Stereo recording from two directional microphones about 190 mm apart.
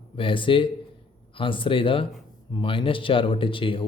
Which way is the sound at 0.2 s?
25° left (ahead or behind).